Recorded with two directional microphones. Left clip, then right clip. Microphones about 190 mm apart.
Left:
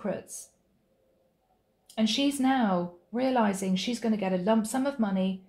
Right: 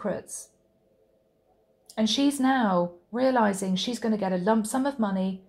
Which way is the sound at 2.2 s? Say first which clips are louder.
Right 2 dB; 25° right (ahead or behind).